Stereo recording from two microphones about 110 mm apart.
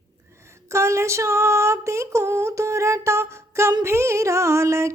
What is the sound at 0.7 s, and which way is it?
Music, 25° right (ahead or behind).